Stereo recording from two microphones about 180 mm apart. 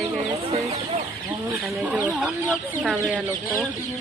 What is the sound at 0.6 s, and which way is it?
Speech, 35° right (ahead or behind).